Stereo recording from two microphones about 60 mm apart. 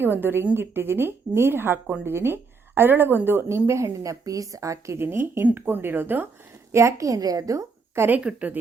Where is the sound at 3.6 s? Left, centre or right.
Right.